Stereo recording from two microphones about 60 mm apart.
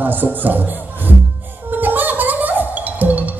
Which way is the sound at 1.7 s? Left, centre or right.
Right.